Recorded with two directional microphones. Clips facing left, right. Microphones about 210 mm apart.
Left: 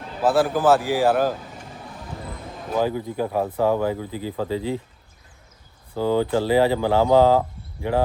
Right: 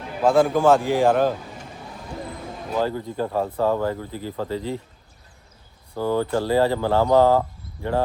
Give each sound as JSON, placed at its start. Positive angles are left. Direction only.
{"t": 0.3, "sound": "speech", "side_deg": 5}
{"t": 2.7, "sound": "speech", "side_deg": 10}
{"t": 6.0, "sound": "speech", "side_deg": 15}
{"t": 7.3, "sound": "a sound", "side_deg": 10}